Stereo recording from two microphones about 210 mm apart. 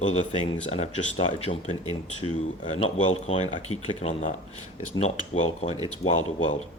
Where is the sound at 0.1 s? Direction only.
30° left (ahead or behind).